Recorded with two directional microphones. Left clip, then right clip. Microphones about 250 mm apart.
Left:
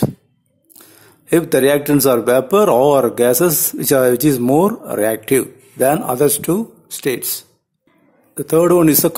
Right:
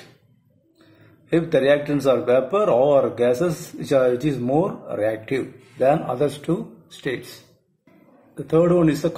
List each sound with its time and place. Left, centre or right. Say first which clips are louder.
1.3 s a man's voice: left 4 dB; left
8.4 s a man's voice: left 5 dB; left